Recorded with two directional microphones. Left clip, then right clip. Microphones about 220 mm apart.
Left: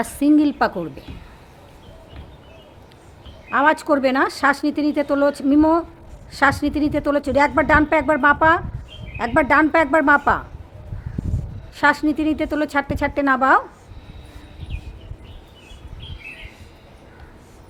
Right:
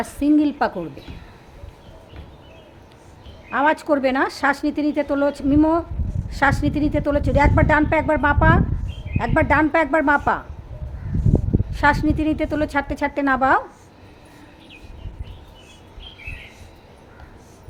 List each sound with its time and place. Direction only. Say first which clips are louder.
0.0 s a woman's voice: left 2 dB; 20° left (ahead or behind)
3.5 s a woman's voice: left 2 dB; 10° left (ahead or behind)
11.7 s a woman's voice: left 1 dB; 10° left (ahead or behind)